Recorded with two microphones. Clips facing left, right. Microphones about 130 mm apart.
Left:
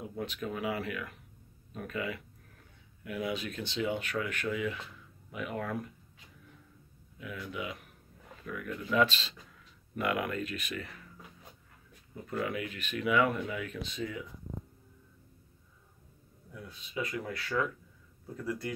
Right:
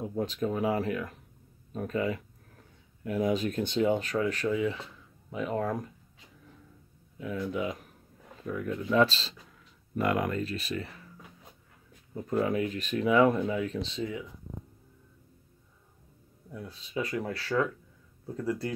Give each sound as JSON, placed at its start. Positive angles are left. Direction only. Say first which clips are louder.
{"t": 0.0, "sound": "speech", "louder": "right 7 dB", "side_deg": -35}
{"t": 7.2, "sound": "speech", "louder": "right 7 dB", "side_deg": -35}
{"t": 12.3, "sound": "speech", "louder": "right 7 dB", "side_deg": -35}
{"t": 16.5, "sound": "speech", "louder": "right 4 dB", "side_deg": -30}